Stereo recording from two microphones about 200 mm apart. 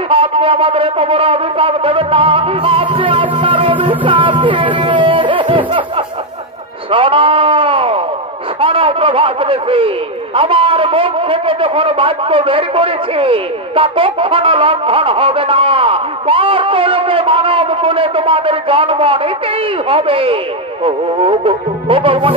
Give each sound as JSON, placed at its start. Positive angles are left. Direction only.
{"t": 0.1, "sound": "a man's voice", "side_deg": -25}
{"t": 4.0, "sound": "music", "side_deg": -25}
{"t": 6.9, "sound": "a sound", "side_deg": -25}
{"t": 8.5, "sound": "a man's voice", "side_deg": -25}